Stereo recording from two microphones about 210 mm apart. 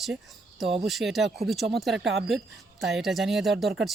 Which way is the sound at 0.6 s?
25° right (ahead or behind).